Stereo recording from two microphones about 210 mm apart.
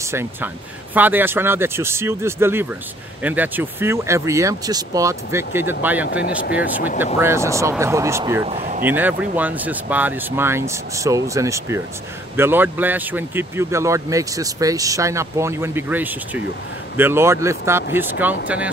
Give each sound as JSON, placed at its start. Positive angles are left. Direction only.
{"t": 0.0, "sound": "speech", "side_deg": -10}
{"t": 7.2, "sound": "speech", "side_deg": -10}
{"t": 8.5, "sound": "speech", "side_deg": -30}
{"t": 8.8, "sound": "speech", "side_deg": -10}